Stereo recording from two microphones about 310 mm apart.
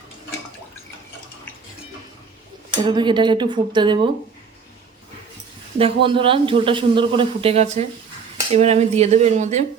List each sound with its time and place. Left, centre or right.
2.7 s speech: centre
5.8 s speech: centre